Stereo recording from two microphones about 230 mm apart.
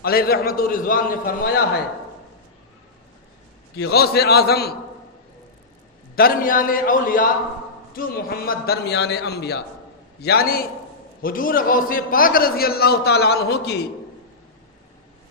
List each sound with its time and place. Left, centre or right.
0.0 s a man's voice: left
3.8 s a man's voice: left
6.1 s a man's voice: left